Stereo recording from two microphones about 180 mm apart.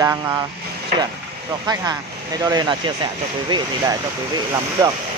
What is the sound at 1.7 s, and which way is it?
Speech, 20° right (ahead or behind).